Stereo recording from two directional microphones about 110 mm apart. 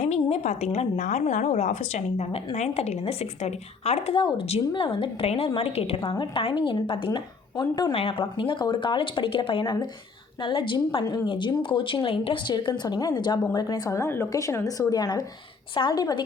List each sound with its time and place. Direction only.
0.0 s a woman's voice: 75° left (ahead or behind)
4.2 s a woman's voice: 50° left (ahead or behind)
7.9 s a woman's voice: 55° left (ahead or behind); by 16.2 s 35° left (ahead or behind)